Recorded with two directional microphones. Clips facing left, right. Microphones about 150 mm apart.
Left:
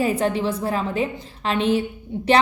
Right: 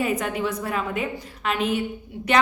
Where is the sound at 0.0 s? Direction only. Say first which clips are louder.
Left 4 dB; 30° left (ahead or behind).